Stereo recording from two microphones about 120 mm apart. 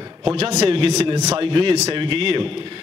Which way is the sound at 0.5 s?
55° right (ahead or behind).